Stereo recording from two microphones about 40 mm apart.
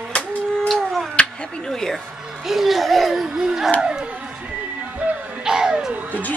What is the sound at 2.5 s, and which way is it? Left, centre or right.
Laughter, centre.